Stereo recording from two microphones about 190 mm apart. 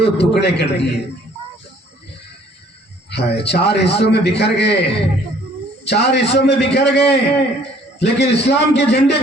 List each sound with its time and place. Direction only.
0.0 s a man's voice: 60° left (ahead or behind)
3.1 s a man's voice: 60° left (ahead or behind)